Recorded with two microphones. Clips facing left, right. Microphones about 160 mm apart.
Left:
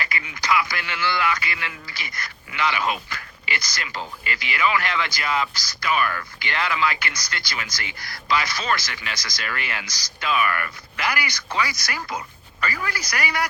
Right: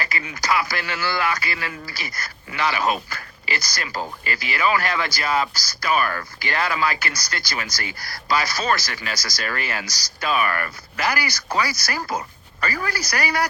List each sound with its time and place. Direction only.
0.0 s speech: 35° right (ahead or behind)